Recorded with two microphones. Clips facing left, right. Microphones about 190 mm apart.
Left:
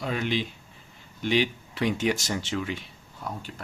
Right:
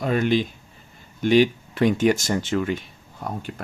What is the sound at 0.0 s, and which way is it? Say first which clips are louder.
Speech: right 7 dB; 50° right (ahead or behind).